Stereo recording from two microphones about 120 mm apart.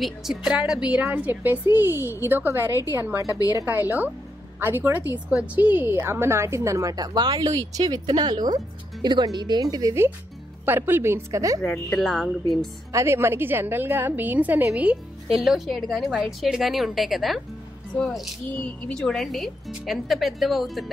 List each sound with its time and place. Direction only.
0.0 s a woman's voice: 5° right (ahead or behind); by 3.3 s 20° right (ahead or behind)
3.3 s a woman's voice: 30° left (ahead or behind)
3.6 s a woman's voice: 15° right (ahead or behind)
10.6 s a woman's voice: 20° right (ahead or behind)
11.9 s speech: centre (ahead or behind)
12.9 s a woman's voice: 20° right (ahead or behind); by 20.8 s centre (ahead or behind)